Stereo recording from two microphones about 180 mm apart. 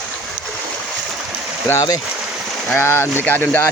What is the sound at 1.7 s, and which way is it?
Speech, 20° left (ahead or behind).